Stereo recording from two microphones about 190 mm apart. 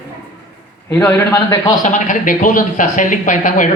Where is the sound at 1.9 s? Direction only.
40° left (ahead or behind).